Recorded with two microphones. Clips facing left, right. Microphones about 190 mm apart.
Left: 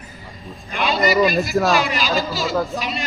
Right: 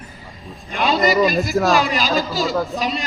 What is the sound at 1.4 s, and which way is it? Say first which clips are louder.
Speech: right 1 dB; centre (ahead or behind).